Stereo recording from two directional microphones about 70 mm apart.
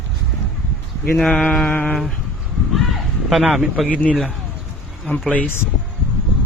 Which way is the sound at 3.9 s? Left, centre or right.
Centre.